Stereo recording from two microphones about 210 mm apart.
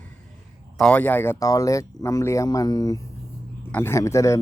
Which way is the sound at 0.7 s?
5° left (ahead or behind).